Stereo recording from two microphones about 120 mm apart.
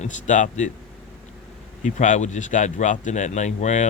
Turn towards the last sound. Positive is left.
turn(degrees=80)